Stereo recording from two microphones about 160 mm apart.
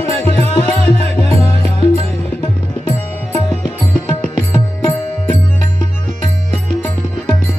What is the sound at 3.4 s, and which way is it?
Music, 15° left (ahead or behind).